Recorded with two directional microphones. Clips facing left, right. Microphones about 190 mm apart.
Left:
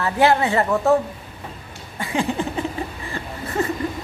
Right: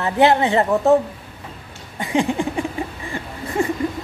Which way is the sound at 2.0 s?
15° right (ahead or behind).